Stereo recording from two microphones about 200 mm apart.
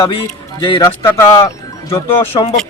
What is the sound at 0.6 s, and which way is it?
A man's voice, 25° left (ahead or behind).